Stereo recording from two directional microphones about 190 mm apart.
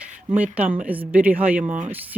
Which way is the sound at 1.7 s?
40° right (ahead or behind).